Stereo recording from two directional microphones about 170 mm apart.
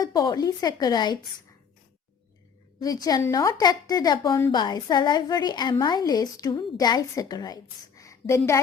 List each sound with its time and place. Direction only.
0.0 s a woman's voice: 20° left (ahead or behind)
2.8 s a woman's voice: 20° left (ahead or behind)